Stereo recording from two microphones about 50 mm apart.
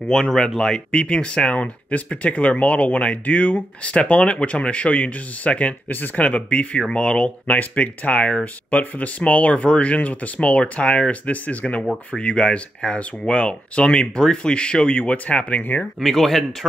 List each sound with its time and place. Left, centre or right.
0.1 s speech: centre; by 5.8 s left
5.9 s speech: left
15.6 s speech: left
16.0 s speech: centre